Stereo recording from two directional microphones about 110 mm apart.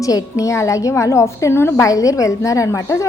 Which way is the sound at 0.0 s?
30° left (ahead or behind).